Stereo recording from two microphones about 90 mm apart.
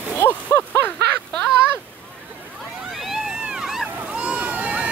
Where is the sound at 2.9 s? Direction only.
5° right (ahead or behind).